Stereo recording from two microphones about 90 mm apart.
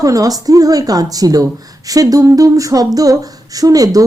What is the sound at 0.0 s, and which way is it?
A woman's voice, 40° right (ahead or behind).